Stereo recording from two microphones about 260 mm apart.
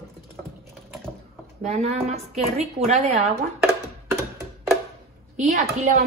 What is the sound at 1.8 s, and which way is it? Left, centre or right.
Speech, right.